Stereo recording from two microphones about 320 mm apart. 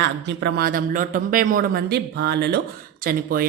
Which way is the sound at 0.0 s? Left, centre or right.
Right.